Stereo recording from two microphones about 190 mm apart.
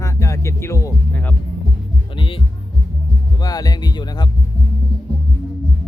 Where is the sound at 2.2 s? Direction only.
25° left (ahead or behind).